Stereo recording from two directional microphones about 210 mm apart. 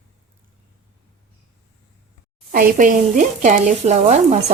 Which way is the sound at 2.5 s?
40° right (ahead or behind).